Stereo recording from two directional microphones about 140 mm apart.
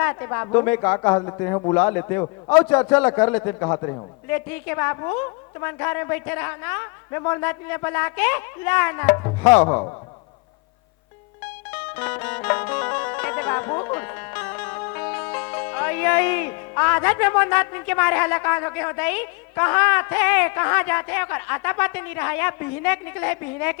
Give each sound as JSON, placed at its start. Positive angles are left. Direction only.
{"t": 0.0, "sound": "speech", "side_deg": 20}
{"t": 4.3, "sound": "a woman's voice", "side_deg": 15}
{"t": 11.7, "sound": "music", "side_deg": 15}